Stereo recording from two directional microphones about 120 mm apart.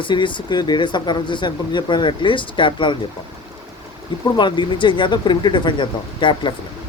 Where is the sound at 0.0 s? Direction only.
40° left (ahead or behind).